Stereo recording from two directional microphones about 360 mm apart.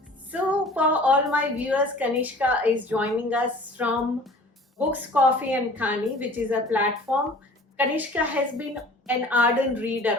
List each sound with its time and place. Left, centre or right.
0.3 s a woman's voice: centre
4.9 s a woman's voice: centre